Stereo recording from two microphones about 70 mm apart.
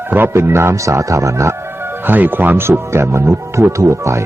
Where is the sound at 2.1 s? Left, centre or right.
Right.